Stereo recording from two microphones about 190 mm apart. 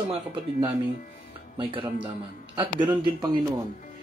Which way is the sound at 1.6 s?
25° right (ahead or behind).